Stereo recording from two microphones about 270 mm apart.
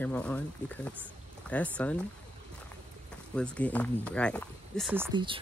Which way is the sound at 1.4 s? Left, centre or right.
Centre.